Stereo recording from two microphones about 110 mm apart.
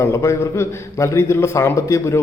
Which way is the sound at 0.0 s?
25° left (ahead or behind).